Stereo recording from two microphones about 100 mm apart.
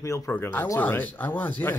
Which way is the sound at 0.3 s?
20° left (ahead or behind).